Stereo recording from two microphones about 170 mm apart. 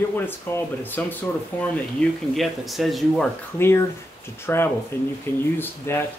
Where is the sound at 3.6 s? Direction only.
15° left (ahead or behind).